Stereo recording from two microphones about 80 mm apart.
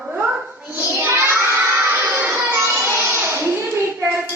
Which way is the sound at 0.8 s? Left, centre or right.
Right.